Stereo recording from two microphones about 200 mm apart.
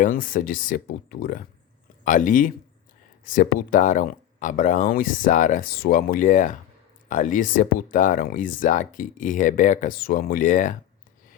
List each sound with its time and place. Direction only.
0.0 s speech: 40° left (ahead or behind)